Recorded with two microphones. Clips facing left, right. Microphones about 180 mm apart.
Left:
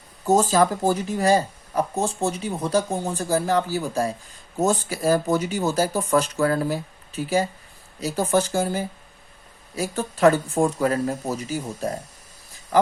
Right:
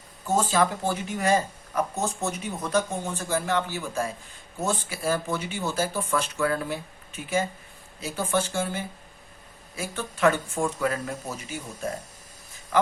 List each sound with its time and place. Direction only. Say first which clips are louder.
0.3 s speech: left 5 dB; 40° left (ahead or behind)